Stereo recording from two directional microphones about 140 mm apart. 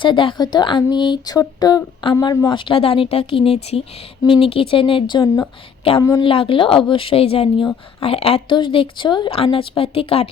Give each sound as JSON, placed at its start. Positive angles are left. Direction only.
{"t": 0.0, "sound": "speech", "side_deg": 35}
{"t": 6.2, "sound": "speech", "side_deg": 40}